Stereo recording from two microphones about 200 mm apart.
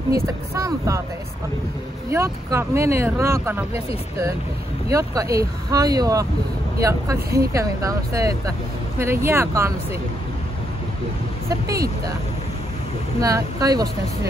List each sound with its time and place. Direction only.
0.1 s speech: 15° right (ahead or behind)
2.0 s speech: 15° right (ahead or behind)
4.8 s speech: 15° right (ahead or behind)
11.4 s speech: 15° right (ahead or behind)
13.2 s speech: 15° right (ahead or behind)